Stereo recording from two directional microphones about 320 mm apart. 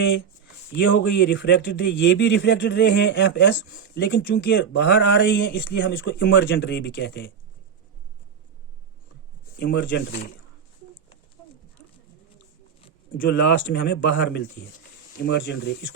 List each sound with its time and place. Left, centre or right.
0.7 s speech: left
9.6 s speech: left
13.1 s speech: left